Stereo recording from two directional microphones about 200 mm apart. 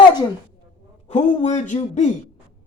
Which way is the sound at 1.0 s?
35° left (ahead or behind).